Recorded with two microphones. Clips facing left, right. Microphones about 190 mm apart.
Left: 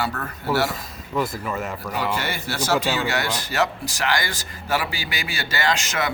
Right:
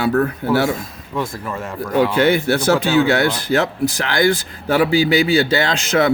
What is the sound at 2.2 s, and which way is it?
Speech, 60° right (ahead or behind).